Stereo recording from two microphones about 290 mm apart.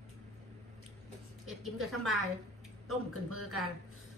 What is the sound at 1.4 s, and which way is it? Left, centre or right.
Speech, centre.